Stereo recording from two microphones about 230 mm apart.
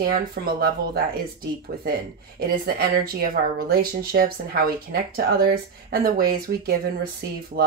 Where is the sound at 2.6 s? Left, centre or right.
Right.